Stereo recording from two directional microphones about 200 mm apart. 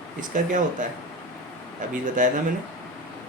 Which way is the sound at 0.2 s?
40° right (ahead or behind).